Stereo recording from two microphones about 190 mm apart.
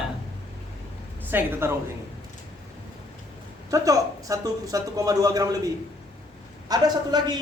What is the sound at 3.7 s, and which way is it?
A man's voice, 15° right (ahead or behind).